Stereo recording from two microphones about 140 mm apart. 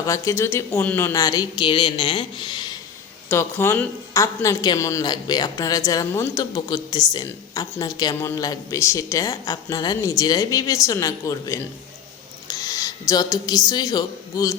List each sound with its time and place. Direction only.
0.0 s a woman's voice: 20° left (ahead or behind)
3.2 s a woman's voice: 15° left (ahead or behind)